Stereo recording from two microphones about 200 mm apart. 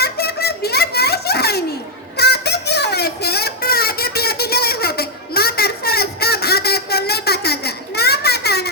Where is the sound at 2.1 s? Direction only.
55° left (ahead or behind).